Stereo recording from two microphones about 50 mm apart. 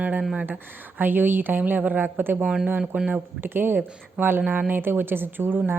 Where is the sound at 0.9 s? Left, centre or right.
Right.